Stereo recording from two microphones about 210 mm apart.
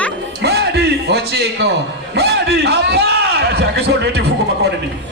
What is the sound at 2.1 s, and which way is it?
A man's voice, 50° right (ahead or behind).